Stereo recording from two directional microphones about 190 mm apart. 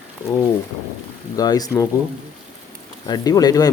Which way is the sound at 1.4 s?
20° left (ahead or behind).